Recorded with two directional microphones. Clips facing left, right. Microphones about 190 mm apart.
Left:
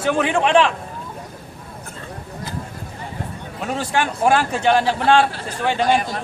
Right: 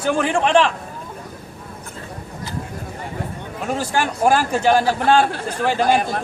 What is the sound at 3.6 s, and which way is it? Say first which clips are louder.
A man's voice: even; centre (ahead or behind).